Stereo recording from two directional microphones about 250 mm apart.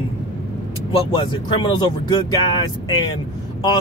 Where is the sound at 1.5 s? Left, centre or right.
Centre.